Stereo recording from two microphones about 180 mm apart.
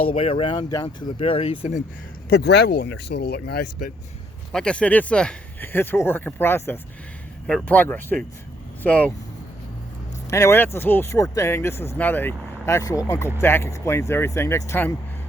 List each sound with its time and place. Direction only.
0.1 s speech: 30° left (ahead or behind)
2.3 s speech: 65° left (ahead or behind)
4.5 s speech: 5° left (ahead or behind)
10.2 s speech: 15° left (ahead or behind)